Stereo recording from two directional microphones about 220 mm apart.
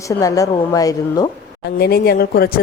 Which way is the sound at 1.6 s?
45° left (ahead or behind).